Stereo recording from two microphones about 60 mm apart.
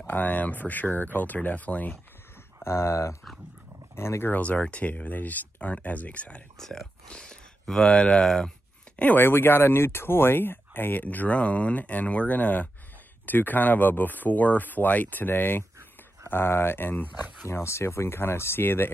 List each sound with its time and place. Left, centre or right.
0.0 s speech: left
2.6 s speech: left
4.3 s speech: left
6.6 s speech: centre
8.9 s speech: left
9.2 s speech: left
17.5 s speech: left